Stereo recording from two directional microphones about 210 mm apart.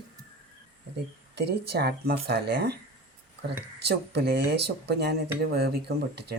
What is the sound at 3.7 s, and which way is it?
Speech, 50° right (ahead or behind).